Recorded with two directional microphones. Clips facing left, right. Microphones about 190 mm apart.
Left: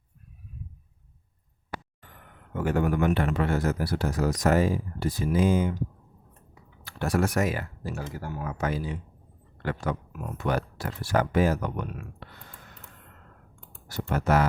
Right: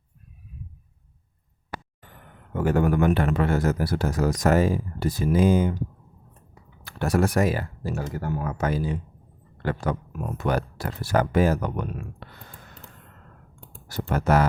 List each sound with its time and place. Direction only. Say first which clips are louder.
2.5 s speech: right 4 dB; 40° right (ahead or behind)
13.7 s speech: right 2 dB; 40° right (ahead or behind)